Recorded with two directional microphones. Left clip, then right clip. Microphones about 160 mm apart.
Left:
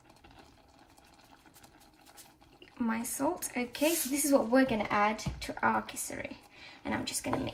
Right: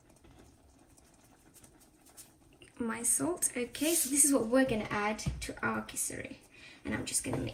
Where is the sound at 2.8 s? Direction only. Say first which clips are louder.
Left 1 dB; 55° left (ahead or behind).